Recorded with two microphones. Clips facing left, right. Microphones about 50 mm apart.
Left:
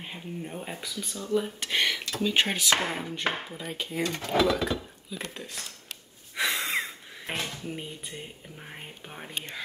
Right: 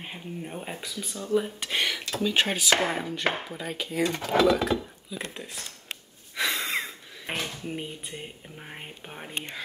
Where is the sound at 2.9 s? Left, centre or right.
Centre.